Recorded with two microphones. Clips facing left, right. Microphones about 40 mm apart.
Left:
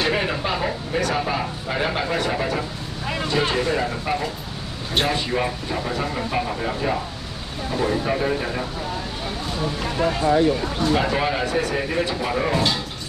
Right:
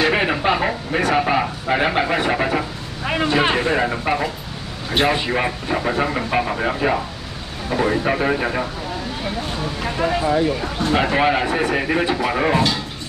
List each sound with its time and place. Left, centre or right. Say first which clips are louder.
0.0 s speech: right 5 dB; right
9.8 s speech: right 3 dB; centre
10.8 s speech: right 5 dB; right